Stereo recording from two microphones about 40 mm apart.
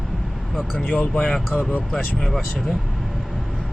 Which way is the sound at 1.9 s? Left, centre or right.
Centre.